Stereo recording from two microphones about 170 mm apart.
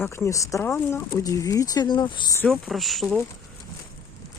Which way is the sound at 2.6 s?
Centre (ahead or behind).